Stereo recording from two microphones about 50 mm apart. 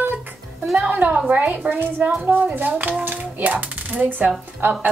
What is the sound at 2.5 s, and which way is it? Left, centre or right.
A child's voice, right.